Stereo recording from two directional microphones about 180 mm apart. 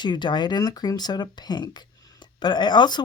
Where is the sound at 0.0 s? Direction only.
25° left (ahead or behind).